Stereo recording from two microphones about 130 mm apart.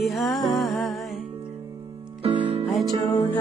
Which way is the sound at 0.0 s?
Centre (ahead or behind).